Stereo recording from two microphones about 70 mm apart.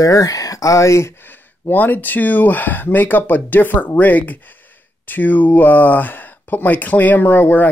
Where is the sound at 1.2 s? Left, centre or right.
Left.